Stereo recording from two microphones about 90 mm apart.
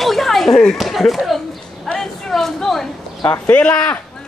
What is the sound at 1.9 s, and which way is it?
Speech, 5° left (ahead or behind).